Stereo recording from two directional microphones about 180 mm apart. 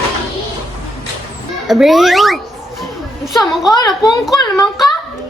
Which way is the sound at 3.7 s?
20° left (ahead or behind).